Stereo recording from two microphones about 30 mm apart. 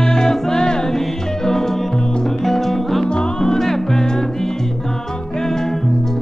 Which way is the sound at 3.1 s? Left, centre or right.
Left.